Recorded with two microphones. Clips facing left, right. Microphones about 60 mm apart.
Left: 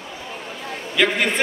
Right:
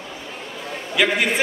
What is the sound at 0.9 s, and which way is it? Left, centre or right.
Speech, centre.